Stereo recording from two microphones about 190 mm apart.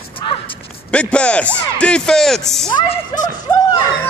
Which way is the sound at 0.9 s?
5° left (ahead or behind).